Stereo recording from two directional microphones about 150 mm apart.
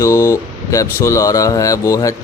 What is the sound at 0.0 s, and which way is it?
Speech, 20° left (ahead or behind).